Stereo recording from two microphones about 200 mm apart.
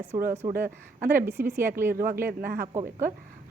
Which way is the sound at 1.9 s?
45° right (ahead or behind).